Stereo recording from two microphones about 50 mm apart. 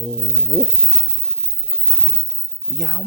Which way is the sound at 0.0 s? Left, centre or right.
Centre.